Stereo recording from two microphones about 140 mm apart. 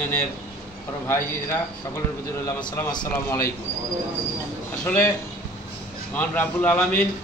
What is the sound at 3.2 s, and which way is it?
Speech, 20° left (ahead or behind).